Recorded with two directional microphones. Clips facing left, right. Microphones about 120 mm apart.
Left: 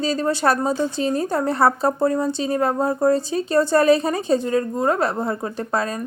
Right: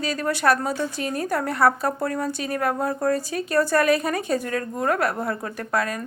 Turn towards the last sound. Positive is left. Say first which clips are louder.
# left 2 dB
turn(degrees=25)  # may be behind; listen again after turning